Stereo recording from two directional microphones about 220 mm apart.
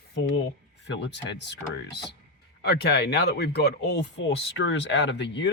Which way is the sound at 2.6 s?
50° left (ahead or behind).